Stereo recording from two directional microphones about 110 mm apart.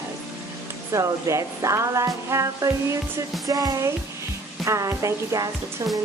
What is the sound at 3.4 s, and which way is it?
Speech, 35° right (ahead or behind).